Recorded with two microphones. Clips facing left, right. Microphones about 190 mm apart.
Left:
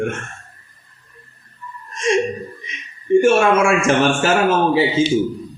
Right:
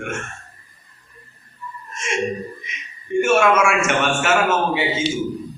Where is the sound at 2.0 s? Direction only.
35° left (ahead or behind).